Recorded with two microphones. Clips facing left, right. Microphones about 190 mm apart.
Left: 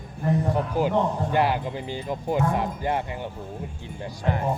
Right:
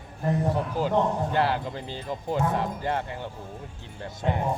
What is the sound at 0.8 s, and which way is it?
Speech, 15° left (ahead or behind).